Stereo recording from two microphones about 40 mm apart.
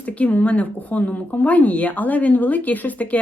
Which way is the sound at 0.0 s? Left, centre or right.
Left.